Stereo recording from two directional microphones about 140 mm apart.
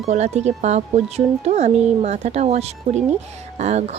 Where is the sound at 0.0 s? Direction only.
50° right (ahead or behind).